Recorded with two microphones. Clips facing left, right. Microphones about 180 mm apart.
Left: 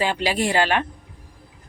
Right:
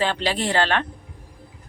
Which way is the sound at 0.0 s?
10° left (ahead or behind).